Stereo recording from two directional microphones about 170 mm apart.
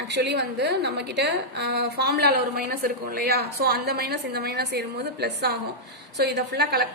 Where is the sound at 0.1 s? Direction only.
85° right.